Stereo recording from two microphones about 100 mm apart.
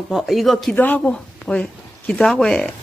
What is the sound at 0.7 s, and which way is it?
Speech, 15° left (ahead or behind).